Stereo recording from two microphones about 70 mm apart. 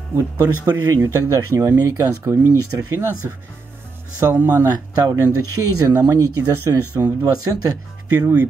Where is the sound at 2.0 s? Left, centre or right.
Right.